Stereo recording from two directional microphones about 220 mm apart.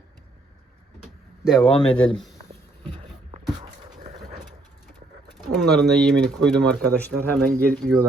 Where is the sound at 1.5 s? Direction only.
Centre (ahead or behind).